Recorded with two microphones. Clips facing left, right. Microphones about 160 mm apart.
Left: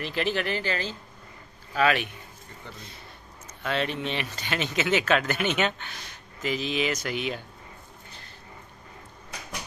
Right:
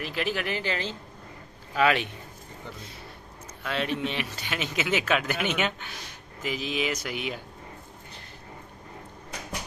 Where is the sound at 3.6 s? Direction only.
5° right (ahead or behind).